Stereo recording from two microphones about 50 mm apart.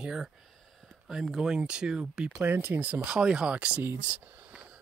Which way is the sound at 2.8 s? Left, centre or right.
Right.